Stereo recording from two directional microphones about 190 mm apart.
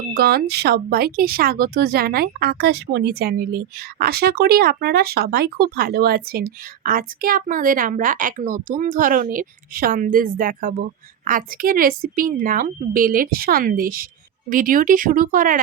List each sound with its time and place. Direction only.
0.1 s speech: 55° right (ahead or behind)